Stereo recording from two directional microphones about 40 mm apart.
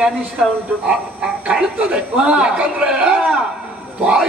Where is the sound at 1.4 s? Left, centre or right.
Right.